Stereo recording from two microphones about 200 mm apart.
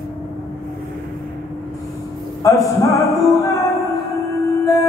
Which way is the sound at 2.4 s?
15° left (ahead or behind).